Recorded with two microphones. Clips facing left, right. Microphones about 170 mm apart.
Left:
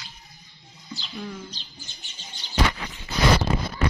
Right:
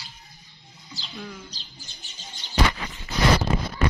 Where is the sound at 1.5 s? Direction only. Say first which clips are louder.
Left 2 dB; 40° right (ahead or behind).